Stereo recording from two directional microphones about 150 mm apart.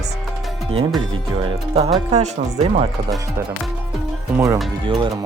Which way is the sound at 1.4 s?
40° right (ahead or behind).